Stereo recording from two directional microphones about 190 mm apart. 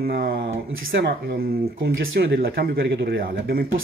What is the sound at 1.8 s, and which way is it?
Speech, 70° right (ahead or behind).